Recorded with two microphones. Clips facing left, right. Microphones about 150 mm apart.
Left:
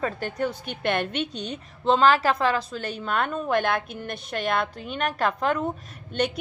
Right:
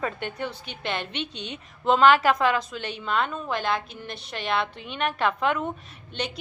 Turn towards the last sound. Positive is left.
turn(degrees=55)  # may be behind; listen again after turning